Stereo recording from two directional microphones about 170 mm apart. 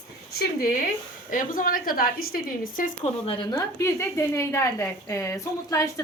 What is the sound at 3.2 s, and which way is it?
A woman's voice, 25° left (ahead or behind).